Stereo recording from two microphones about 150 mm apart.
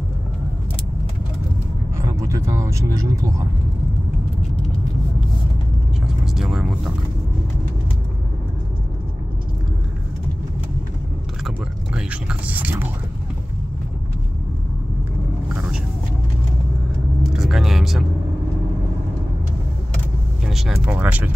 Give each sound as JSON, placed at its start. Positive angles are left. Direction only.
{"t": 2.0, "sound": "speech", "side_deg": -20}
{"t": 6.0, "sound": "vehicle", "side_deg": 0}
{"t": 11.4, "sound": "speech", "side_deg": -5}
{"t": 17.2, "sound": "speech", "side_deg": 0}
{"t": 20.4, "sound": "speech", "side_deg": -5}